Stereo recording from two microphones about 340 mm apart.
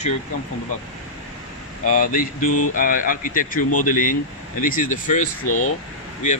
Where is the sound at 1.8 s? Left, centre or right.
Left.